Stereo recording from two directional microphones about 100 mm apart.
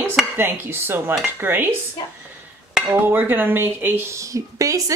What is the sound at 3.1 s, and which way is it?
Speech, 20° right (ahead or behind).